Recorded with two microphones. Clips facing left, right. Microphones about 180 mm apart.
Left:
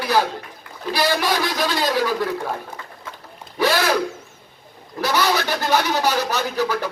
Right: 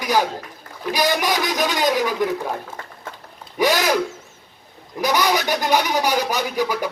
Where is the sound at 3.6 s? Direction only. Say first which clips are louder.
Right 1 dB; 15° right (ahead or behind).